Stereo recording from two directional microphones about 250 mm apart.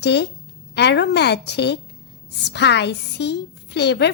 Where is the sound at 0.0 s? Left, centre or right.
Left.